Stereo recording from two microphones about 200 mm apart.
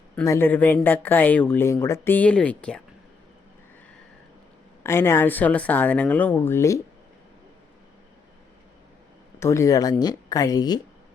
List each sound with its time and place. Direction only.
0.2 s speech: 10° left (ahead or behind)
4.8 s speech: 10° left (ahead or behind)
9.4 s speech: 15° left (ahead or behind)